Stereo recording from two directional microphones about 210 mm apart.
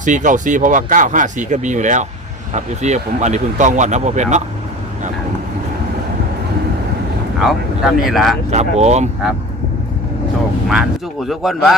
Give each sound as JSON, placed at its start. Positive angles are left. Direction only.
{"t": 0.0, "sound": "speech", "side_deg": -35}
{"t": 7.3, "sound": "speech", "side_deg": 0}
{"t": 8.4, "sound": "speech", "side_deg": -30}
{"t": 11.3, "sound": "speech", "side_deg": 0}